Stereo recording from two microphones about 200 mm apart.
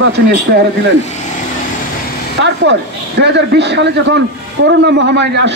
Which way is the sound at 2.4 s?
65° right (ahead or behind).